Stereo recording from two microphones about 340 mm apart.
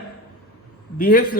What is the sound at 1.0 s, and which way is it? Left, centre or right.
Speech, left.